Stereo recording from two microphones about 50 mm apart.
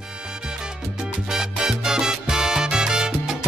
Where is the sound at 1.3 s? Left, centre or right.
Centre.